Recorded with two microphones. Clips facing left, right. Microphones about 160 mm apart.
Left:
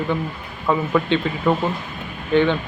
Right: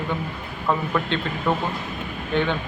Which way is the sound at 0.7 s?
5° left (ahead or behind).